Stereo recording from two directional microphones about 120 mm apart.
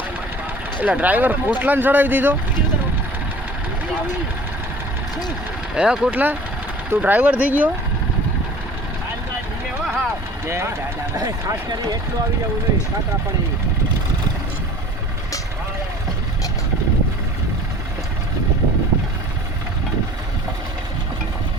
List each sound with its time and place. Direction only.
0.8 s speech: 15° right (ahead or behind)
5.7 s speech: 5° right (ahead or behind)
9.8 s vehicle: 5° right (ahead or behind)
10.4 s speech: 20° right (ahead or behind)